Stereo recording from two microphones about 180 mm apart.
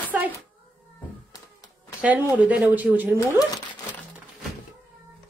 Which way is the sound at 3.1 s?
20° left (ahead or behind).